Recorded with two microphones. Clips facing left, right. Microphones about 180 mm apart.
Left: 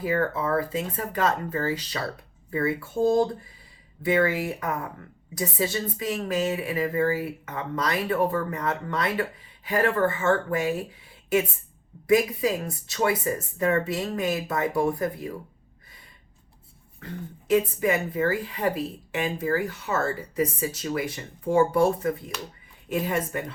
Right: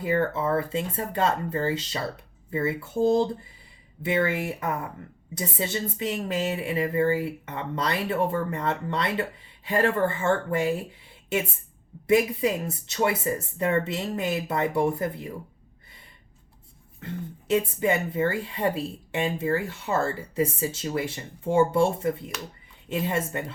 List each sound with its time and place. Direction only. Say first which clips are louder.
0.0 s speech: right 1 dB; 25° right (ahead or behind)
12.0 s speech: even; 25° right (ahead or behind)
17.5 s speech: left 1 dB; 25° right (ahead or behind)